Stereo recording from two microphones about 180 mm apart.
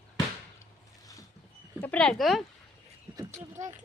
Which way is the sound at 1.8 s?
5° left (ahead or behind).